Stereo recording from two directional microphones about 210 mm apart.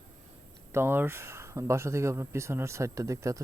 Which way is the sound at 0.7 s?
10° right (ahead or behind).